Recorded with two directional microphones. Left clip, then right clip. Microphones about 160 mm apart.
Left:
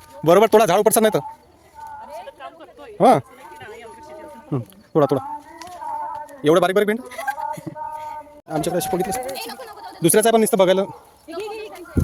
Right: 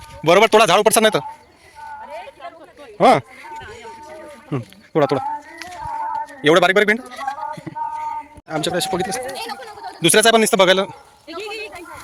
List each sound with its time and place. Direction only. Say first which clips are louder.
0.3 s a man's voice: right 2 dB; 30° left (ahead or behind)
3.0 s a man's voice: right 1 dB; 20° left (ahead or behind)
4.5 s a sound: even; 25° left (ahead or behind)
5.8 s a sound: right 4 dB; 80° left
6.4 s a man's voice: right 3 dB; centre (ahead or behind)
7.1 s speech: even; 30° left (ahead or behind)
8.6 s a man's voice: right 2 dB; 25° left (ahead or behind)
9.3 s speech: right 2 dB; 50° right (ahead or behind)
10.0 s speech: right 2 dB; 20° left (ahead or behind)